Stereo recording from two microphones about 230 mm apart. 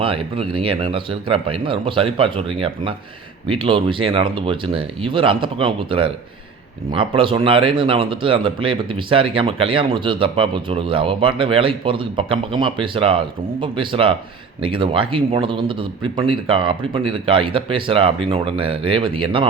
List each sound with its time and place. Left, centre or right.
0.0 s speech: right